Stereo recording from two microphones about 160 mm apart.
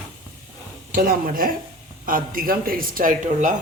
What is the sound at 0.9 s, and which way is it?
Speech, 60° right (ahead or behind).